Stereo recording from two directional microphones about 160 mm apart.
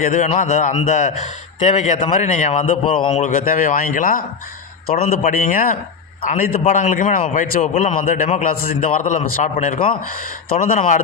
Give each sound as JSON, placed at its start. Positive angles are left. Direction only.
{"t": 0.1, "sound": "a man's voice", "side_deg": 50}
{"t": 2.8, "sound": "a man's voice", "side_deg": 35}
{"t": 3.1, "sound": "a man's voice", "side_deg": 50}